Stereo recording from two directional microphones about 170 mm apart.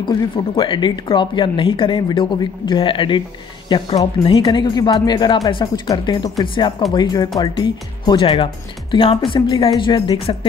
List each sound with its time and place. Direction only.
0.0 s speech: 25° left (ahead or behind)